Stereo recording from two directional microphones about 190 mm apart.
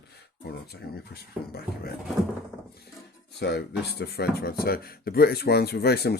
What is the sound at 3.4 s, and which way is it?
Speech, 60° left (ahead or behind).